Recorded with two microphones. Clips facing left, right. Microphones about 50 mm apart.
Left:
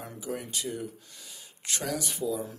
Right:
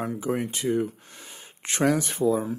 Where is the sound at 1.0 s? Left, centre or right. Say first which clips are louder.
Right 4 dB; right.